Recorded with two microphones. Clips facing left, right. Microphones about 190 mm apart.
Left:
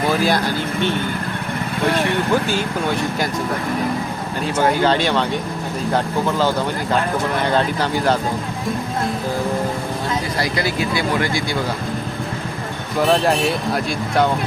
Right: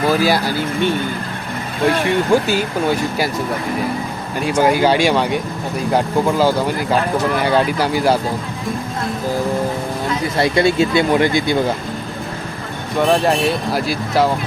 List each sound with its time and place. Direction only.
0.2 s speech: 5° right (ahead or behind)
2.0 s speech: 10° right (ahead or behind)
4.4 s speech: 10° right (ahead or behind)
10.3 s speech: 25° right (ahead or behind)
13.0 s speech: centre (ahead or behind)